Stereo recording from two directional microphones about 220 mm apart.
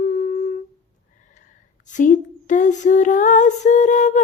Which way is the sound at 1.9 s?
35° left (ahead or behind).